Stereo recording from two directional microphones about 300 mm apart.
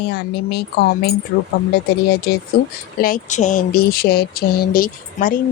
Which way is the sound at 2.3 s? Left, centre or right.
Left.